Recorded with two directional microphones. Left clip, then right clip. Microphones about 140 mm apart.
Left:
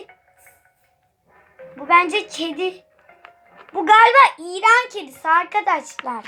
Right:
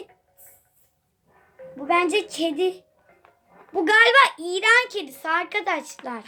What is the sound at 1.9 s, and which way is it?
Child singing, 60° right (ahead or behind).